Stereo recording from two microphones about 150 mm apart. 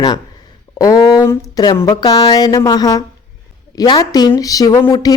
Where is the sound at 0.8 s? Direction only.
25° left (ahead or behind).